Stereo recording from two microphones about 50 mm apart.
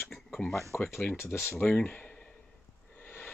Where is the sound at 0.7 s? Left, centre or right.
Left.